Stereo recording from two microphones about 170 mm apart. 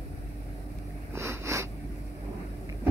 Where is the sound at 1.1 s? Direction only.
15° right (ahead or behind).